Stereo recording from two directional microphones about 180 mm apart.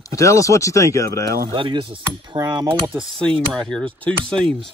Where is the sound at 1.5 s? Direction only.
30° right (ahead or behind).